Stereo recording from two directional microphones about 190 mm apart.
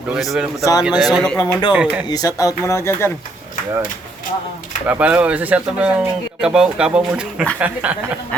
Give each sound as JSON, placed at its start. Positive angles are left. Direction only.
{"t": 0.2, "sound": "a man's voice", "side_deg": 0}
{"t": 0.6, "sound": "speech", "side_deg": 20}
{"t": 0.9, "sound": "a man's voice", "side_deg": 0}
{"t": 1.4, "sound": "speech", "side_deg": 20}
{"t": 1.7, "sound": "speech", "side_deg": -10}
{"t": 2.0, "sound": "speech", "side_deg": 20}
{"t": 4.9, "sound": "speech", "side_deg": -10}